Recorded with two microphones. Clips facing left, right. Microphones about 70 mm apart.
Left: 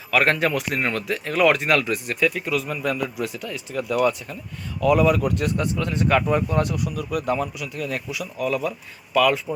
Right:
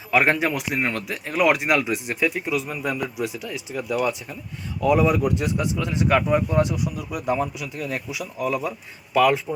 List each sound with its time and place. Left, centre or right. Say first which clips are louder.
0.1 s speech: even; centre